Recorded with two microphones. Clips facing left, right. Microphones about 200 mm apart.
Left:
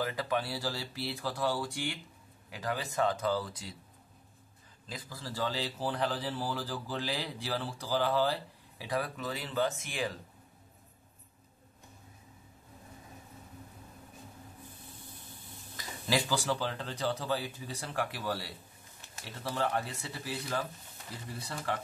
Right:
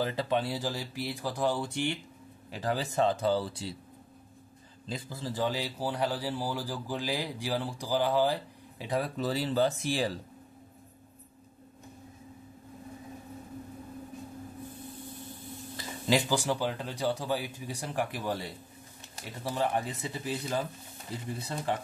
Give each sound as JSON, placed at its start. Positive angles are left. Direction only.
{"t": 0.0, "sound": "speech", "side_deg": -25}
{"t": 4.8, "sound": "a man's voice", "side_deg": -25}
{"t": 16.1, "sound": "a man's voice", "side_deg": -15}